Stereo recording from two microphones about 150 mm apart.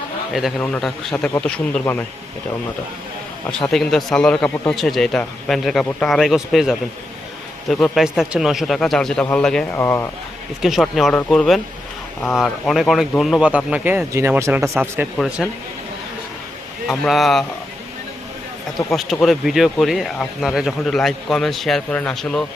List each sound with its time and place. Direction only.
0.3 s speech: centre (ahead or behind)
3.7 s speech: centre (ahead or behind)
9.7 s speech: 15° left (ahead or behind)
10.6 s speech: centre (ahead or behind); by 15.0 s 15° right (ahead or behind)
16.9 s speech: centre (ahead or behind)
18.9 s speech: centre (ahead or behind)